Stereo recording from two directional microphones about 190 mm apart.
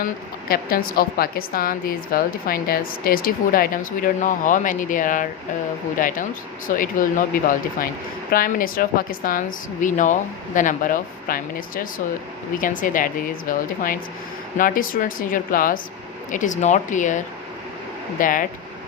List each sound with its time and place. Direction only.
0.0 s a woman's voice: 50° left (ahead or behind)